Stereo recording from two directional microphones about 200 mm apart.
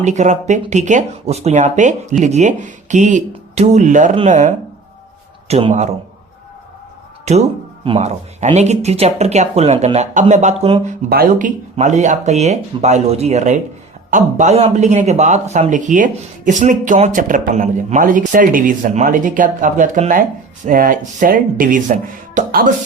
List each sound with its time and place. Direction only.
0.0 s a man's voice: 35° right (ahead or behind)
7.3 s a man's voice: 35° right (ahead or behind)
11.1 s a man's voice: 45° right (ahead or behind)